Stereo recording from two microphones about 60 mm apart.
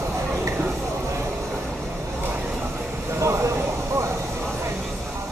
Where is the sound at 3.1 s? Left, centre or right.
Right.